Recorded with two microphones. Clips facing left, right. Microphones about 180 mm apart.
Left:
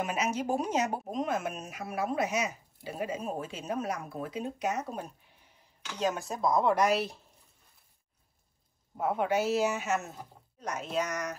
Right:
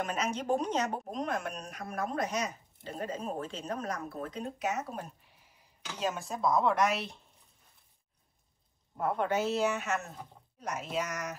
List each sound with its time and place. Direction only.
0.0 s speech: 5° left (ahead or behind)
8.9 s speech: 5° left (ahead or behind)